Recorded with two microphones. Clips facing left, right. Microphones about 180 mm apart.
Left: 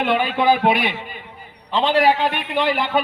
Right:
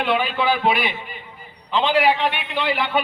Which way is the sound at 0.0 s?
45° left (ahead or behind).